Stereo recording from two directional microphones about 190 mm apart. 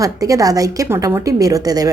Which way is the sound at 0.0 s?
20° right (ahead or behind).